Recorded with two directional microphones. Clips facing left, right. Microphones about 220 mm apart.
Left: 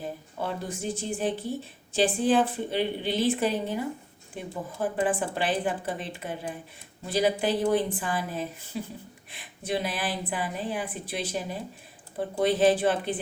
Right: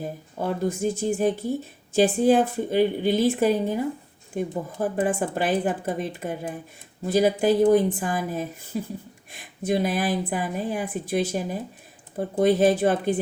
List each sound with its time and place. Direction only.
0.0 s a woman's voice: 45° right (ahead or behind)